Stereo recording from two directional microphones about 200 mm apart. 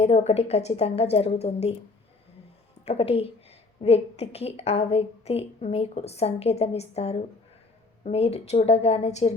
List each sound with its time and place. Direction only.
0.0 s a woman's voice: 30° left (ahead or behind)
2.8 s a woman's voice: 30° left (ahead or behind)